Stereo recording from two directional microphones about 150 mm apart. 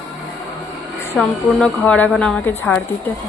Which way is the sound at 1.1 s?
Centre (ahead or behind).